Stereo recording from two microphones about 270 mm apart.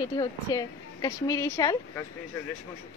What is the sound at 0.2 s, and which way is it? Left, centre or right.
Speech, centre.